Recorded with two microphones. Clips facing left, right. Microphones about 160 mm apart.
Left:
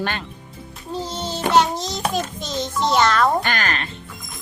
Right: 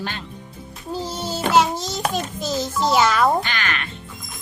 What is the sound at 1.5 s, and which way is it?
Music, centre (ahead or behind).